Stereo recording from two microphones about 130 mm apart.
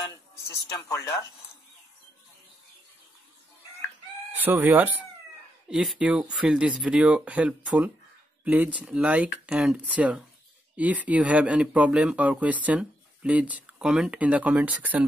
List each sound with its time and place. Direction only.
0.5 s speech: 20° left (ahead or behind)
4.4 s speech: 15° right (ahead or behind)